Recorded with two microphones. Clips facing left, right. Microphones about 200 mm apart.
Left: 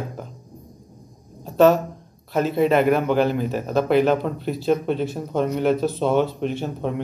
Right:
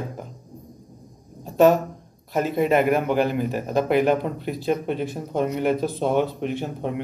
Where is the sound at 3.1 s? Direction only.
50° right (ahead or behind).